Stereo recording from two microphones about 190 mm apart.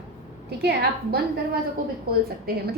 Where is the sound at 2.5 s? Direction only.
55° right (ahead or behind).